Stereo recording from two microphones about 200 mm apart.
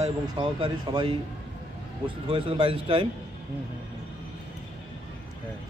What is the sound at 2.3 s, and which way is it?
Speech, 25° right (ahead or behind).